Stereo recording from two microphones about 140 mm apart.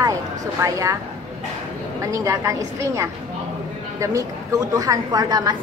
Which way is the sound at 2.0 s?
20° right (ahead or behind).